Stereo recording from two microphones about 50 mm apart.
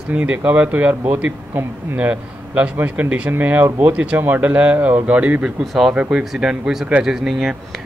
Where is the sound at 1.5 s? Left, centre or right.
Right.